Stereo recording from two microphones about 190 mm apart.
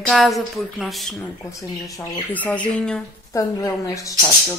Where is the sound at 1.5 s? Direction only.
15° left (ahead or behind).